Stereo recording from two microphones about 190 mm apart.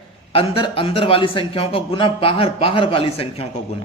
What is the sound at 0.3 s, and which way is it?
A man's voice, 30° left (ahead or behind).